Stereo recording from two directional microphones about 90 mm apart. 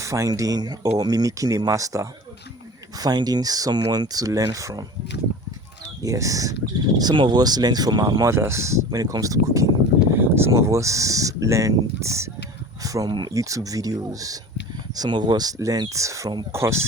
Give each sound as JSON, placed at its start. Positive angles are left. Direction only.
{"t": 0.0, "sound": "speech", "side_deg": -35}
{"t": 3.0, "sound": "speech", "side_deg": -50}
{"t": 6.0, "sound": "speech", "side_deg": -40}
{"t": 7.0, "sound": "speech", "side_deg": -55}
{"t": 10.1, "sound": "speech", "side_deg": -25}
{"t": 13.1, "sound": "speech", "side_deg": -55}
{"t": 13.3, "sound": "speech", "side_deg": -40}
{"t": 14.9, "sound": "speech", "side_deg": -50}